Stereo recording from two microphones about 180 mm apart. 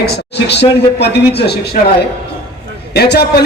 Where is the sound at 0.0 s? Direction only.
70° left (ahead or behind).